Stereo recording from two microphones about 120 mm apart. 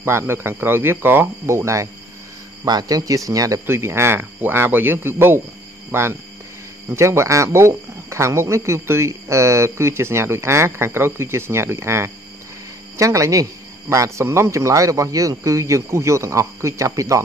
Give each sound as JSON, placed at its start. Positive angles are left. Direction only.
{"t": 0.0, "sound": "speech", "side_deg": -20}